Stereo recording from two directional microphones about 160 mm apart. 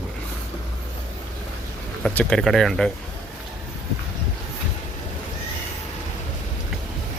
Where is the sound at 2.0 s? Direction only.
5° left (ahead or behind).